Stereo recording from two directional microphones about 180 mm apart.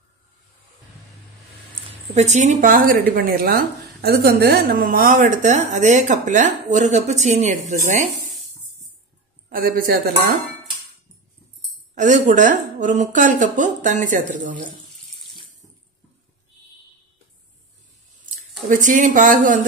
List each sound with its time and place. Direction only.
2.1 s a woman's voice: 40° right (ahead or behind)
2.7 s a woman's voice: 50° right (ahead or behind)
9.5 s a woman's voice: 50° right (ahead or behind)
11.9 s a woman's voice: 45° right (ahead or behind)
18.7 s a woman's voice: 45° right (ahead or behind)